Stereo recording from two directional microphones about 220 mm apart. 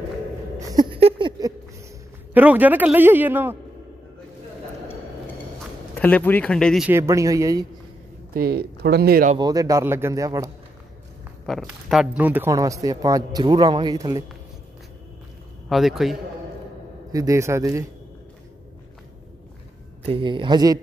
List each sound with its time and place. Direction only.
0.6 s a sound: 15° right (ahead or behind)
2.3 s speech: 5° right (ahead or behind)
5.9 s speech: 5° left (ahead or behind)
6.9 s speech: 15° right (ahead or behind)
8.3 s speech: 45° right (ahead or behind)
9.4 s speech: 15° right (ahead or behind)
11.4 s speech: centre (ahead or behind); by 14.2 s 15° right (ahead or behind)
15.7 s speech: centre (ahead or behind)
17.1 s speech: 15° right (ahead or behind)
20.1 s speech: 20° right (ahead or behind)